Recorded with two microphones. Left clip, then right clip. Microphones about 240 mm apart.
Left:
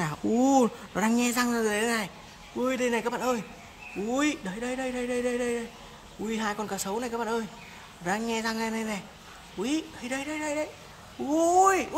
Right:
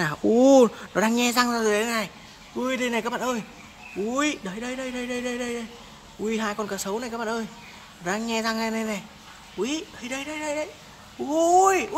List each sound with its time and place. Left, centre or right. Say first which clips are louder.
0.4 s speech: right 7 dB; centre